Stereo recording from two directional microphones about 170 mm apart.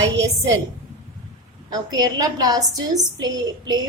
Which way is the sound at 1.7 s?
25° right (ahead or behind).